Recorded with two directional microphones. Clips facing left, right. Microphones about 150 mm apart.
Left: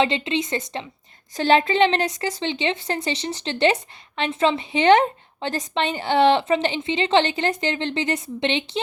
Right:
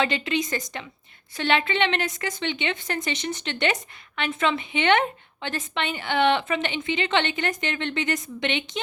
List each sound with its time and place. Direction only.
0.0 s a woman's voice: 25° left (ahead or behind)